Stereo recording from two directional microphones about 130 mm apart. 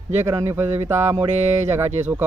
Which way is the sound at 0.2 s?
20° right (ahead or behind).